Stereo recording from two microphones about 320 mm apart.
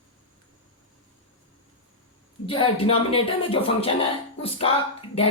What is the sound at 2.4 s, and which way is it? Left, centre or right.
Speech, centre.